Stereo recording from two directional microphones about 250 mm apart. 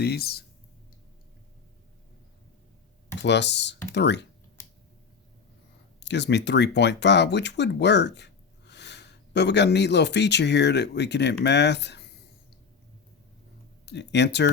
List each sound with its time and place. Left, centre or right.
0.0 s speech: left
3.2 s speech: left
6.0 s speech: left
13.8 s speech: left